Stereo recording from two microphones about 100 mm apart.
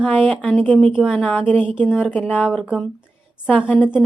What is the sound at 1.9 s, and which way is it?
Speech, 10° right (ahead or behind).